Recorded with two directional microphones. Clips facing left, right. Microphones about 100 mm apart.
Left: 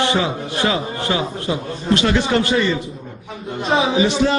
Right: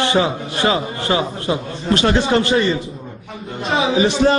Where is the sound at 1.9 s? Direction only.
35° right (ahead or behind).